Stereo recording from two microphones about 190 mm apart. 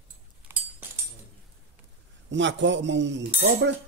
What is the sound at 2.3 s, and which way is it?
Speech, 70° right (ahead or behind).